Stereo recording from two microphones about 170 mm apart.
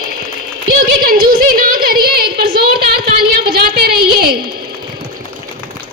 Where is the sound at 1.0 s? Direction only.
60° right (ahead or behind).